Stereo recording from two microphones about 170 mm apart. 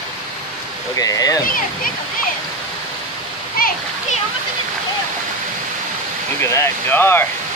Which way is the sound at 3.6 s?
60° left (ahead or behind).